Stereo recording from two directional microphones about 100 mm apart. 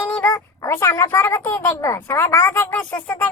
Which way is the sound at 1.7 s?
30° left (ahead or behind).